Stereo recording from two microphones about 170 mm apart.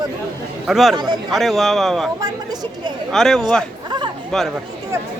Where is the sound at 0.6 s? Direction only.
Centre (ahead or behind).